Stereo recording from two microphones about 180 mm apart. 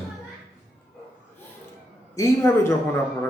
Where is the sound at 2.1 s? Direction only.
15° left (ahead or behind).